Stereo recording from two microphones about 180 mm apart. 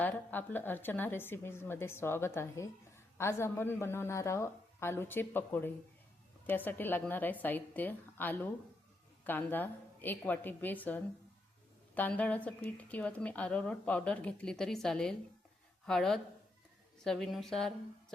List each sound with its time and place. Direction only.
0.0 s a woman's voice: 10° left (ahead or behind)